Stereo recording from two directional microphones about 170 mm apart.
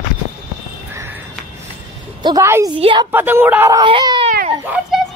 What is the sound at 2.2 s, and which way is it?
Speech, 15° right (ahead or behind).